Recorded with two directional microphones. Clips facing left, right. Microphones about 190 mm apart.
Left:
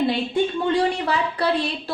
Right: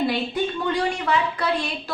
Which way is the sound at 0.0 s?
25° left (ahead or behind).